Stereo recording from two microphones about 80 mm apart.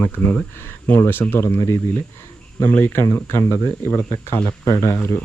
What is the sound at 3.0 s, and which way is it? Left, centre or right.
Speech, left.